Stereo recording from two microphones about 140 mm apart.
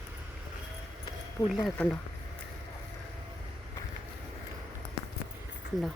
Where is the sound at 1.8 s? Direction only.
5° left (ahead or behind).